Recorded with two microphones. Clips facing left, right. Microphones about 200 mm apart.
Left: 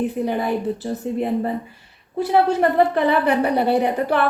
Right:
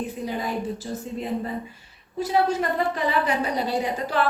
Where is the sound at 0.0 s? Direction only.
60° left (ahead or behind).